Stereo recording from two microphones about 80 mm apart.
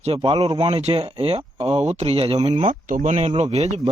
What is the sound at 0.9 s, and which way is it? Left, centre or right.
Speech, right.